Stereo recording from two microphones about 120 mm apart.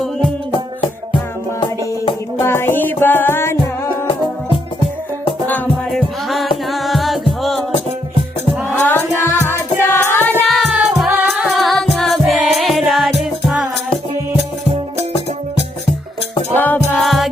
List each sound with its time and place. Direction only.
2.4 s music: 20° left (ahead or behind)
5.9 s music: centre (ahead or behind)
8.7 s music: 15° left (ahead or behind)
10.5 s music: centre (ahead or behind)
16.6 s music: 15° left (ahead or behind)